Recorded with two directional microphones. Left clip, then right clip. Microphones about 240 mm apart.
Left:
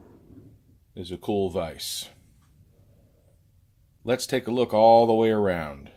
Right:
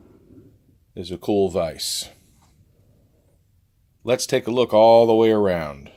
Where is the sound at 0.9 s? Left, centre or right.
Right.